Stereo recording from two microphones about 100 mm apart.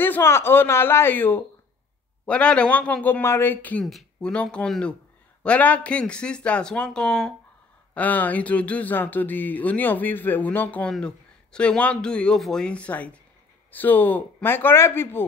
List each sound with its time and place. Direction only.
0.0 s speech: 25° left (ahead or behind); by 7.3 s 5° left (ahead or behind)
7.9 s speech: 15° left (ahead or behind)